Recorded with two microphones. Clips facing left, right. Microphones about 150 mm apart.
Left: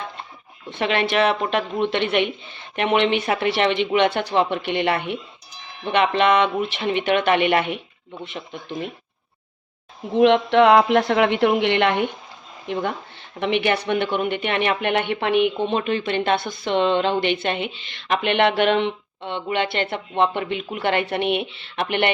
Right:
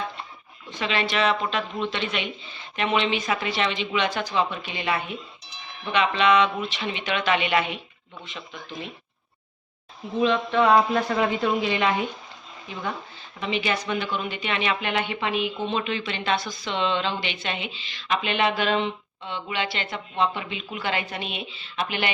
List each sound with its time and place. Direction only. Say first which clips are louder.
0.7 s speech: left 5 dB; 60° left (ahead or behind)
10.2 s a woman's voice: left 7 dB; 75° left (ahead or behind)
15.6 s speech: left 5 dB; 50° left (ahead or behind)